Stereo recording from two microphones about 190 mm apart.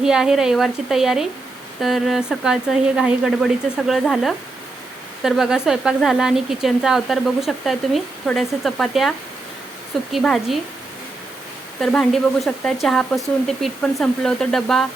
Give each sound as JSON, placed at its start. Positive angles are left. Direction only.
{"t": 0.0, "sound": "speech", "side_deg": -5}
{"t": 11.8, "sound": "speech", "side_deg": 5}